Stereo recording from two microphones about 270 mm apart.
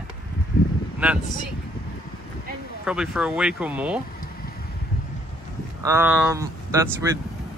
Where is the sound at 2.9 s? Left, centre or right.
Centre.